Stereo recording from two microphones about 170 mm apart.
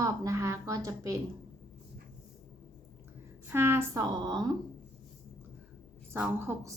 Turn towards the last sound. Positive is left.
turn(degrees=-15)  # may be behind; listen again after turning